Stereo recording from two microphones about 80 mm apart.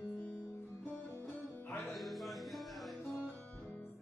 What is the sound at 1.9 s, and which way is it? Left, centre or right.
Music, centre.